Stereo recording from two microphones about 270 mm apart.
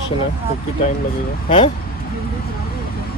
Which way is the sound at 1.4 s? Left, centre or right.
Centre.